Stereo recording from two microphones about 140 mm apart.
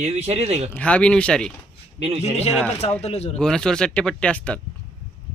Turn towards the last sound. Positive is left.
turn(degrees=10)  # may be behind; listen again after turning